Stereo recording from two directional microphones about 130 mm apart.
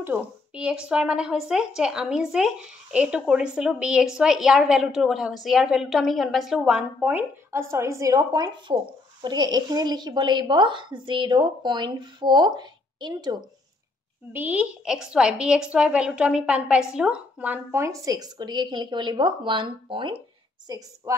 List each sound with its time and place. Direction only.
0.0 s a woman's voice: 10° right (ahead or behind); by 13.4 s 35° right (ahead or behind)
14.3 s a woman's voice: 10° right (ahead or behind); by 20.2 s 40° right (ahead or behind)
20.6 s a woman's voice: 30° right (ahead or behind)